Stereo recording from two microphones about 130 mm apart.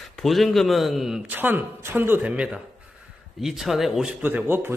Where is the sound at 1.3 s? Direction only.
15° right (ahead or behind).